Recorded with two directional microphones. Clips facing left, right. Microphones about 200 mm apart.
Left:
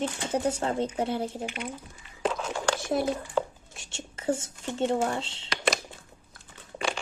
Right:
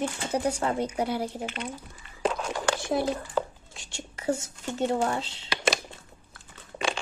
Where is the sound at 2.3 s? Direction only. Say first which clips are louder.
Right 1 dB; 5° right (ahead or behind).